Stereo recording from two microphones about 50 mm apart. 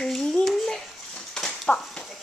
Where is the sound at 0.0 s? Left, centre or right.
Centre.